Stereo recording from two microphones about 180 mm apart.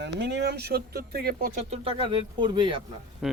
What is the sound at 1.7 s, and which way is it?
Speech, 30° right (ahead or behind).